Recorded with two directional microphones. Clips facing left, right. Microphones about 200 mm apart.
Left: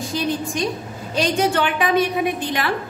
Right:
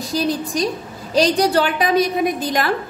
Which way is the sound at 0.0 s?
35° right (ahead or behind).